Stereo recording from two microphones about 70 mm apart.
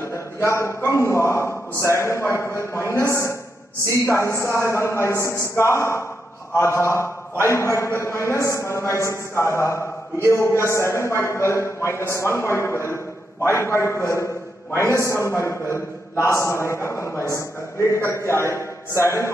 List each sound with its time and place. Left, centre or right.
0.0 s a man's voice: left